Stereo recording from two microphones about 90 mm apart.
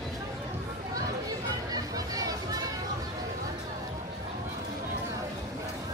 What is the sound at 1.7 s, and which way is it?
Music, 45° right (ahead or behind).